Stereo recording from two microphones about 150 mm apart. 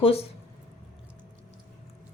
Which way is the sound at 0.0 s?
45° left (ahead or behind).